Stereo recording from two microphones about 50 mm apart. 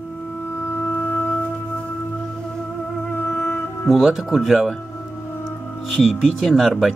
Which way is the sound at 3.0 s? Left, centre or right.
Left.